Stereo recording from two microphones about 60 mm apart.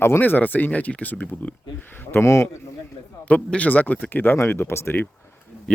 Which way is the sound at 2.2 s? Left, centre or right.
Left.